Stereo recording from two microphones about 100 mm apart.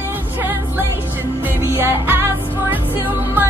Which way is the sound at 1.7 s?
20° right (ahead or behind).